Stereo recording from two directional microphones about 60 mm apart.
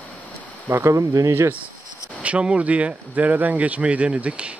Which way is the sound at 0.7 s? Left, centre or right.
Right.